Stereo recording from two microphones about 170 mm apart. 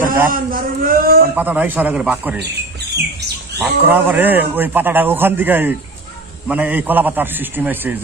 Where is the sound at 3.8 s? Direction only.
10° right (ahead or behind).